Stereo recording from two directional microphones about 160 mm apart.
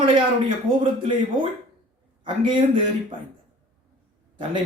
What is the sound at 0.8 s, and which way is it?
A man's voice, 30° right (ahead or behind).